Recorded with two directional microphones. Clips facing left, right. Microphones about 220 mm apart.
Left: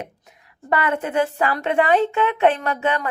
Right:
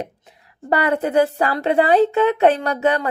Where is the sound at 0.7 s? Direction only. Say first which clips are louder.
Right 4 dB; 35° right (ahead or behind).